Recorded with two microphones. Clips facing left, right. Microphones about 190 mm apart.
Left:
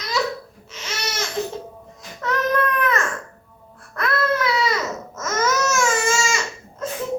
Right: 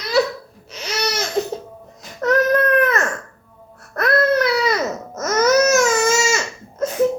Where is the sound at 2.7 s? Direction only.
40° right (ahead or behind).